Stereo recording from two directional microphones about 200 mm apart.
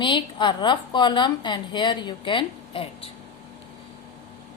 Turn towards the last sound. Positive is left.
turn(degrees=25)  # may be behind; listen again after turning